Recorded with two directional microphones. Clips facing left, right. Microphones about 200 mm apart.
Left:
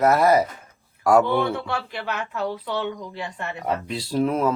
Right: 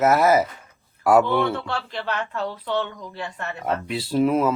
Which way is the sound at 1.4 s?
10° left (ahead or behind).